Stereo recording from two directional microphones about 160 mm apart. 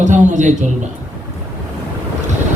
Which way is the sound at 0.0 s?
50° right (ahead or behind).